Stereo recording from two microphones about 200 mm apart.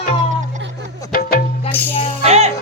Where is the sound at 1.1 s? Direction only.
45° left (ahead or behind).